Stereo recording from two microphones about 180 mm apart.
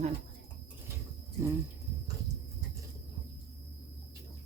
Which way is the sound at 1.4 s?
15° right (ahead or behind).